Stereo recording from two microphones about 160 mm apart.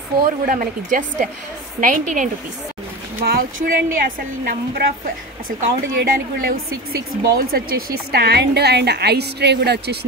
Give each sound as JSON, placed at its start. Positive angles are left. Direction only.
{"t": 0.5, "sound": "a woman's voice", "side_deg": -55}
{"t": 3.3, "sound": "speech", "side_deg": -70}